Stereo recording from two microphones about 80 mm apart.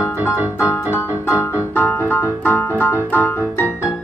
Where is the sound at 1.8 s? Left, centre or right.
Left.